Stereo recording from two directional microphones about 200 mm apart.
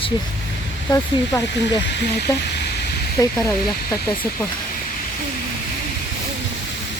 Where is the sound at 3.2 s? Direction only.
15° left (ahead or behind).